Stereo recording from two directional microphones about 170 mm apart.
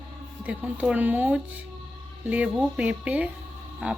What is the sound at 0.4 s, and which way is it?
Speech, 10° right (ahead or behind).